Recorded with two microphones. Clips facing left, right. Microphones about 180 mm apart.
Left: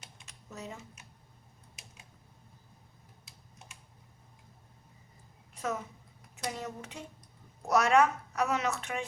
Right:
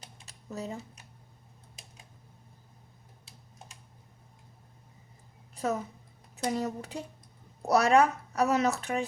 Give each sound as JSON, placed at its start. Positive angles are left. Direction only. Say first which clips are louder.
{"t": 0.0, "sound": "typing", "louder": "right 3 dB", "side_deg": -35}
{"t": 5.5, "sound": "a woman's voice", "louder": "right 4 dB", "side_deg": -35}